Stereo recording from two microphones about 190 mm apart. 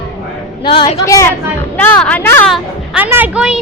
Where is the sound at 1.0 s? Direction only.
15° left (ahead or behind).